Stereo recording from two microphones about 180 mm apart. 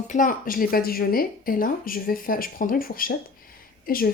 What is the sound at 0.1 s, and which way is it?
A woman's voice, 50° left (ahead or behind).